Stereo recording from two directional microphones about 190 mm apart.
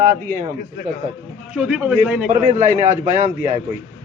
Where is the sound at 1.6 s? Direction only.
5° right (ahead or behind).